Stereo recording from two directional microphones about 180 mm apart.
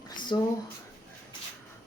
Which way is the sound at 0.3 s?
25° left (ahead or behind).